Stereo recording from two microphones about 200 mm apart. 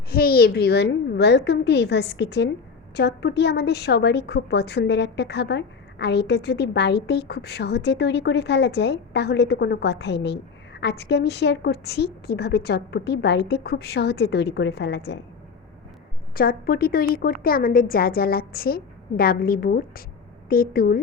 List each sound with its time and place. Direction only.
0.1 s a woman's voice: 50° left (ahead or behind)
16.3 s a woman's voice: 50° left (ahead or behind)